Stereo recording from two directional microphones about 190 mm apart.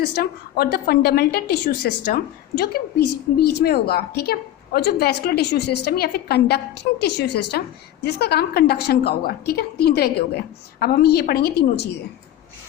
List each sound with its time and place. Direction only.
0.0 s a woman's voice: 55° left (ahead or behind)